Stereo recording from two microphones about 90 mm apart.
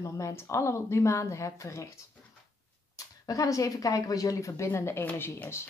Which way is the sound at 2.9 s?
40° left (ahead or behind).